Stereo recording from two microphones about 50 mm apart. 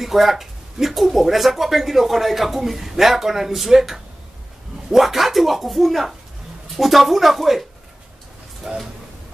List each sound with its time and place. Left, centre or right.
0.0 s speech: centre
8.6 s speech: right